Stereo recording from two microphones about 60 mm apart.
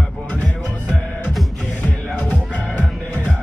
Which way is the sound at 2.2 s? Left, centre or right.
Left.